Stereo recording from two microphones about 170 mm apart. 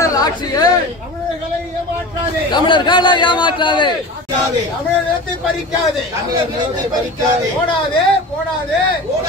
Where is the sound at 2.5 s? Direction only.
25° left (ahead or behind).